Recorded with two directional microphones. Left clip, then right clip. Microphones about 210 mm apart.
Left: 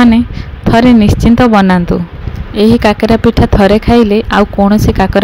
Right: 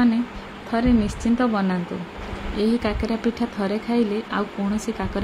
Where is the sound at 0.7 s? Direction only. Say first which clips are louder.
Left 14 dB; 45° left (ahead or behind).